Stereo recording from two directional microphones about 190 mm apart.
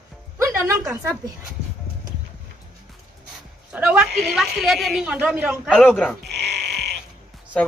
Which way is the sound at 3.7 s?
10° right (ahead or behind).